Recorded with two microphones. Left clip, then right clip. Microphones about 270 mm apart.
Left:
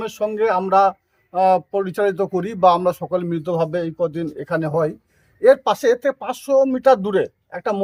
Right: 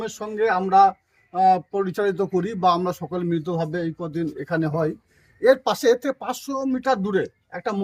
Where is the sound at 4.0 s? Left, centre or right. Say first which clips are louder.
Left 6 dB; centre.